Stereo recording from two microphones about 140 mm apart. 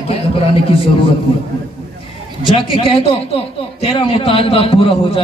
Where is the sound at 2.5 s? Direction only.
40° left (ahead or behind).